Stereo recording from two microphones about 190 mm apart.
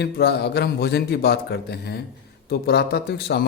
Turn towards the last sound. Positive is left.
turn(degrees=60)  # may be behind; listen again after turning